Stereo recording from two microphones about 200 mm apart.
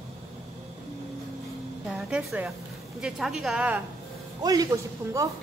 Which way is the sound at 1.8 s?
5° right (ahead or behind).